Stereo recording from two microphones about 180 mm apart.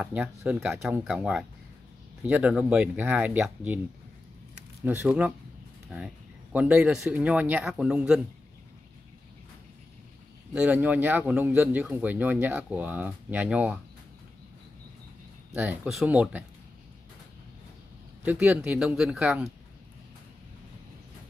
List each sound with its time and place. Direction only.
0.0 s speech: 10° right (ahead or behind)
4.8 s speech: 10° right (ahead or behind)
10.5 s speech: 10° right (ahead or behind)
15.5 s speech: 10° right (ahead or behind)
18.2 s speech: 10° right (ahead or behind)